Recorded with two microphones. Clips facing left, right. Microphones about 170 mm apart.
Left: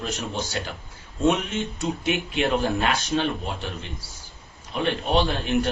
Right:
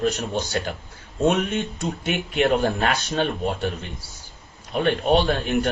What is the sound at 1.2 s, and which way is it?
Speech, 60° right (ahead or behind).